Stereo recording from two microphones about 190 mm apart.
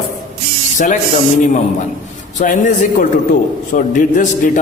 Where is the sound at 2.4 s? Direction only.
40° left (ahead or behind).